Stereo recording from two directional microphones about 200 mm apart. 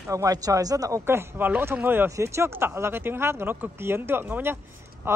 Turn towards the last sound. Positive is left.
turn(degrees=-10)  # may be behind; listen again after turning